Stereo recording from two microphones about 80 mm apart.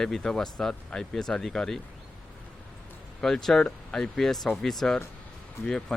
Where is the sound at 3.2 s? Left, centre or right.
Centre.